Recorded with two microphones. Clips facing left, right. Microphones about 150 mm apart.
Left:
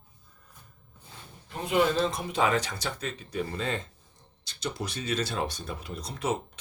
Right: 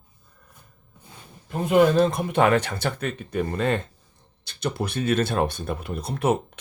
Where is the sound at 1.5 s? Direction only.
50° right (ahead or behind).